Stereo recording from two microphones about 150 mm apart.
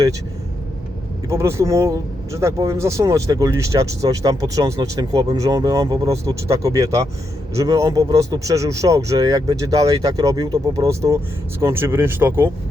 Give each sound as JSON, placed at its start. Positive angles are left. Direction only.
{"t": 1.3, "sound": "speech", "side_deg": -20}